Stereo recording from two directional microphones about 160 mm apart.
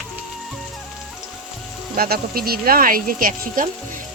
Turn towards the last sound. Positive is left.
turn(degrees=-60)  # may be behind; listen again after turning